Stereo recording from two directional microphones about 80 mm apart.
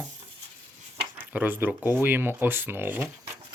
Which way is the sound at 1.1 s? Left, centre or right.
Right.